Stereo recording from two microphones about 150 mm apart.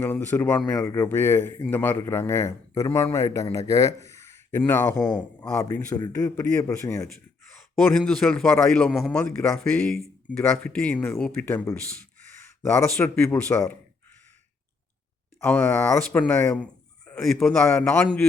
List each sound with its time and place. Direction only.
0.0 s a man's voice: 15° left (ahead or behind)
5.6 s speech: 20° left (ahead or behind)
7.8 s a man's voice: 5° left (ahead or behind)
13.1 s speech: 5° left (ahead or behind)
15.4 s a man's voice: 10° left (ahead or behind)